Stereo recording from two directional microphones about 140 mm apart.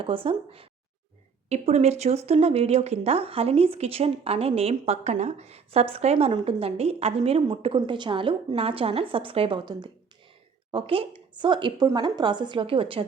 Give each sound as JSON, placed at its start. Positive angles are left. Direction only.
{"t": 0.0, "sound": "a woman's voice", "side_deg": -40}